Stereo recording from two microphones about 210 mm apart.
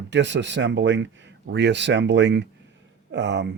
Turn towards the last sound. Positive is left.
turn(degrees=-55)  # may be behind; listen again after turning